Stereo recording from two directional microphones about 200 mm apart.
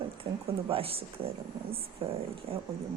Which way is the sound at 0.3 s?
30° right (ahead or behind).